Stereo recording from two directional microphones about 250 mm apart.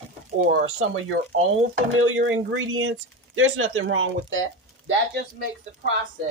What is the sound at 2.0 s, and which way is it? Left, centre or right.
Speech, right.